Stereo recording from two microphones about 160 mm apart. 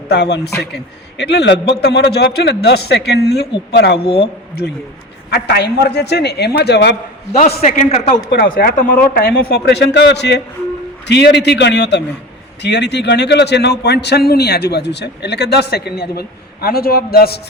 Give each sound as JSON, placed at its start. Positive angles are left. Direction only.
{"t": 0.1, "sound": "a man's voice", "side_deg": 90}
{"t": 5.3, "sound": "a man's voice", "side_deg": 90}
{"t": 7.9, "sound": "a man's voice", "side_deg": 40}
{"t": 8.3, "sound": "a man's voice", "side_deg": 70}